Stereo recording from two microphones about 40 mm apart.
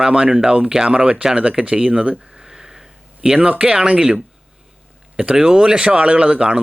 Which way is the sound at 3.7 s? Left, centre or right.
Centre.